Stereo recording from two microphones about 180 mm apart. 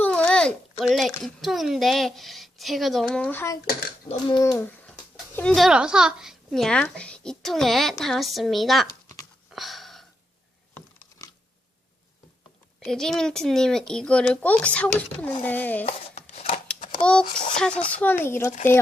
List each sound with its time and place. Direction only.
0.0 s a sound: 5° left (ahead or behind)
0.9 s speech: centre (ahead or behind)
4.1 s a child's voice: 25° left (ahead or behind)
4.6 s a child's voice: 10° left (ahead or behind)
9.5 s a sound: centre (ahead or behind)
12.8 s speech: centre (ahead or behind)
15.9 s chopping: 35° left (ahead or behind)
17.0 s speech: 5° left (ahead or behind)